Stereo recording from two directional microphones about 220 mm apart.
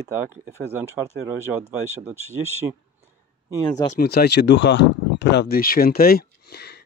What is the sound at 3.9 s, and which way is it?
Speech, 45° left (ahead or behind).